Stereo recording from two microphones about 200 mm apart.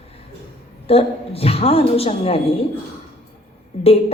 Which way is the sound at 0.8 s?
30° left (ahead or behind).